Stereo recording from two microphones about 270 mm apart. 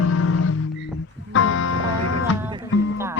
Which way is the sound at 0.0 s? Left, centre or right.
Left.